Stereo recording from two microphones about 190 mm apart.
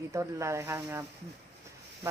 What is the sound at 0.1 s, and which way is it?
Speech, 15° right (ahead or behind).